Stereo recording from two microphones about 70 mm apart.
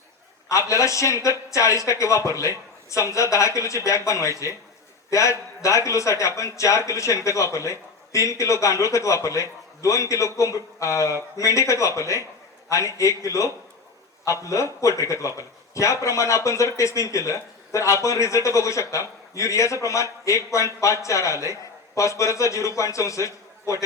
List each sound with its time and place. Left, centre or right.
0.4 s speech: left